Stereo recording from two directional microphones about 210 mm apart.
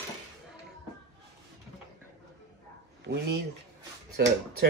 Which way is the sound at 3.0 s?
55° right (ahead or behind).